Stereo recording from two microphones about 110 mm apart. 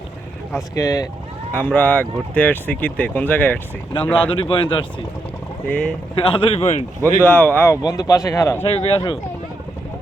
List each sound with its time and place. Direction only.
0.5 s speech: 30° left (ahead or behind)
1.5 s speech: 15° left (ahead or behind)
4.1 s speech: 50° left (ahead or behind)
5.6 s speech: 10° left (ahead or behind)
6.1 s a man's voice: 50° left (ahead or behind); by 6.8 s 75° left (ahead or behind)
7.0 s speech: 20° left (ahead or behind)
7.7 s speech: 35° left (ahead or behind)
8.6 s a man's voice: 65° left (ahead or behind)